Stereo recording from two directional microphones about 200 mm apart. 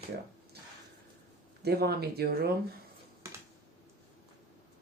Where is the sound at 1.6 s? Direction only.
50° right (ahead or behind).